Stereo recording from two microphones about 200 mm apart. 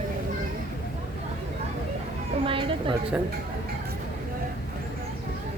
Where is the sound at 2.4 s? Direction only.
25° right (ahead or behind).